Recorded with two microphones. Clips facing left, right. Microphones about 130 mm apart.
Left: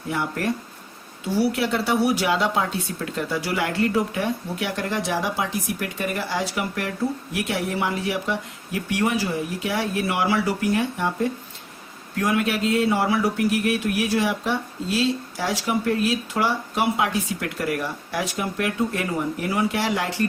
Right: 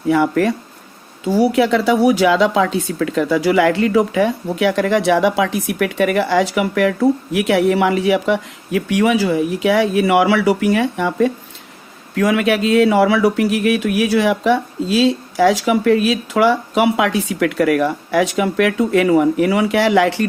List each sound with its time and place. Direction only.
0.1 s speech: 90° right